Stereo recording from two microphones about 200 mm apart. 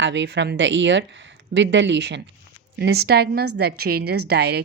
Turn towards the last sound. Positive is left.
turn(degrees=-55)  # may be behind; listen again after turning